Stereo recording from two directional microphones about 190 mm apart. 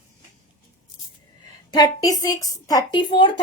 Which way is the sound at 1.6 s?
20° left (ahead or behind).